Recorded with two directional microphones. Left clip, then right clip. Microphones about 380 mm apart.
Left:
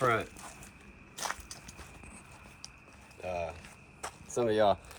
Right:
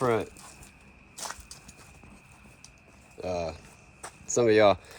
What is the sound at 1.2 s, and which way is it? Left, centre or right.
Crushing, left.